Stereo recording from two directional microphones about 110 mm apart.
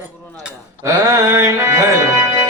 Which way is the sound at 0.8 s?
30° right (ahead or behind).